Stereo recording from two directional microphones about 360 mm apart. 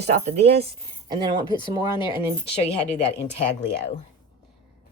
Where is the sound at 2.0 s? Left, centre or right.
Centre.